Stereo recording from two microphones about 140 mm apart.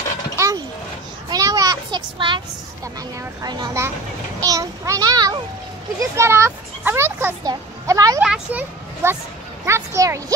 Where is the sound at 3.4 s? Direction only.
30° right (ahead or behind).